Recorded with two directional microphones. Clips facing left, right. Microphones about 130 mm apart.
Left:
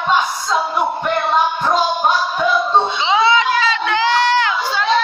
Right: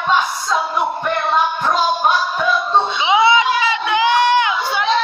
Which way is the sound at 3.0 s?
15° right (ahead or behind).